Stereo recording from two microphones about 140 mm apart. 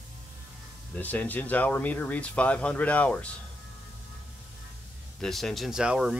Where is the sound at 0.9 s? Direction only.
10° left (ahead or behind).